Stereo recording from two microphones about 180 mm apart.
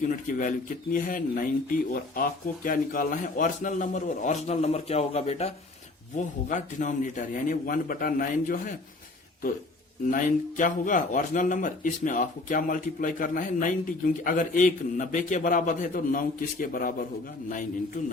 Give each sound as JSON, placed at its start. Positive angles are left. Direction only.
{"t": 0.3, "sound": "a man's voice", "side_deg": 45}
{"t": 10.1, "sound": "a man's voice", "side_deg": 45}